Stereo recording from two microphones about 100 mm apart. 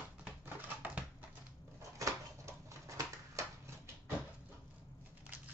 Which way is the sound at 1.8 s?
30° right (ahead or behind).